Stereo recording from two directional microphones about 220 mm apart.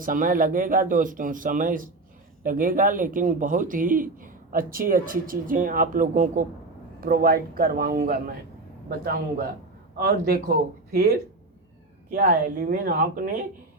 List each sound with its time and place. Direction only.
0.0 s speech: 40° right (ahead or behind)